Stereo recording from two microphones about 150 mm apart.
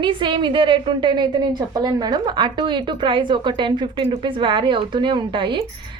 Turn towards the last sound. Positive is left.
turn(degrees=-30)  # may be behind; listen again after turning